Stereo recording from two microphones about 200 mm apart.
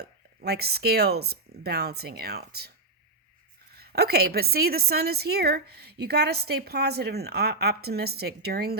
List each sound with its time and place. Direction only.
0.4 s a woman's voice: 50° right (ahead or behind)
3.8 s a woman's voice: 50° right (ahead or behind)